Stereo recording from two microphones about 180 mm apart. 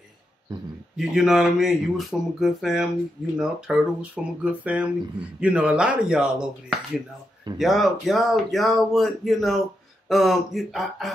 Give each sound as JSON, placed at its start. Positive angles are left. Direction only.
{"t": 0.9, "sound": "speech", "side_deg": 0}
{"t": 7.5, "sound": "speech", "side_deg": 0}